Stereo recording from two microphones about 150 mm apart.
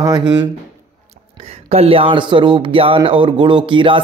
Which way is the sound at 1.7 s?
40° right (ahead or behind).